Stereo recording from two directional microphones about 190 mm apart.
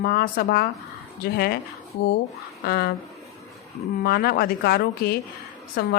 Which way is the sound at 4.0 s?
55° left (ahead or behind).